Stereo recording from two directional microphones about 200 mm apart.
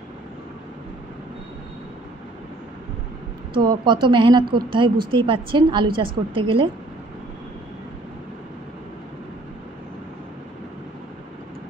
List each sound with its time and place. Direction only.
3.5 s a woman's voice: 25° right (ahead or behind)